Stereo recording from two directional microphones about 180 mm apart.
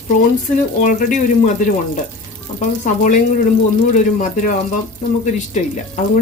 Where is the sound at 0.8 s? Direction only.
45° left (ahead or behind).